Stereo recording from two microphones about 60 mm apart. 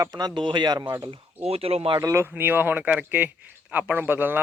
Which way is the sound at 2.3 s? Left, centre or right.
Right.